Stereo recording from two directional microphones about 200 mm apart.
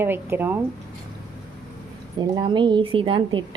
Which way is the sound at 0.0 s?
10° right (ahead or behind).